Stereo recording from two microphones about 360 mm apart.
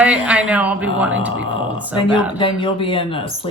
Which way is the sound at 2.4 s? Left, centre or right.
Centre.